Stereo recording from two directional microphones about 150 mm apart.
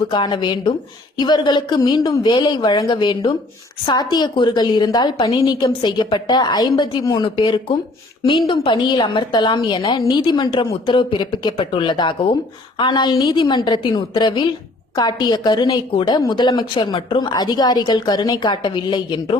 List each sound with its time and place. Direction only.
0.1 s a woman's voice: 30° left (ahead or behind)